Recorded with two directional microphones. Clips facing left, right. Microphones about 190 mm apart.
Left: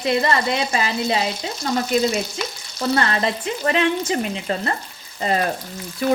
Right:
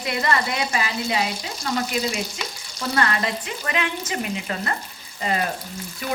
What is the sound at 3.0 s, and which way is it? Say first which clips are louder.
Frying: right 1 dB; 30° left (ahead or behind).